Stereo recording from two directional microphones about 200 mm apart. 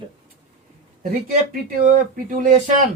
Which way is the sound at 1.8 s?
45° right (ahead or behind).